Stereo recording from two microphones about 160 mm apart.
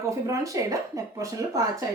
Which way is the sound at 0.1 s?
20° right (ahead or behind).